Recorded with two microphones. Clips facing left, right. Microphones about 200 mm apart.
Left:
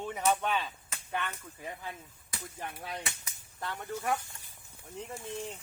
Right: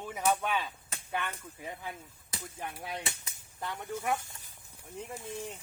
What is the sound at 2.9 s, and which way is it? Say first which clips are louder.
Speech: right 1 dB; 20° right (ahead or behind).